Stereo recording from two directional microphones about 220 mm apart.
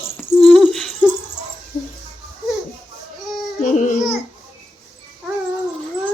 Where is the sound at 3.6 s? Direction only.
35° left (ahead or behind).